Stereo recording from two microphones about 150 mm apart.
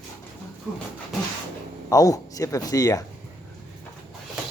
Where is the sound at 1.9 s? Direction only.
25° left (ahead or behind).